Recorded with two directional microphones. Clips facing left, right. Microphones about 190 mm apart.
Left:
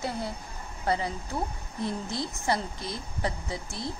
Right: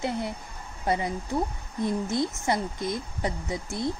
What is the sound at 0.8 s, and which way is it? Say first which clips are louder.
Speech: right 2 dB; 20° right (ahead or behind).